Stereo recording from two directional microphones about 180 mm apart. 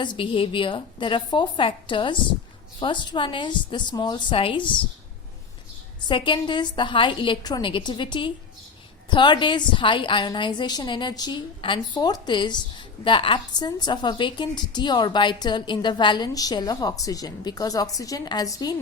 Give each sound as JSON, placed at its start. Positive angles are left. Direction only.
{"t": 0.0, "sound": "a woman's voice", "side_deg": 25}
{"t": 6.1, "sound": "a woman's voice", "side_deg": 25}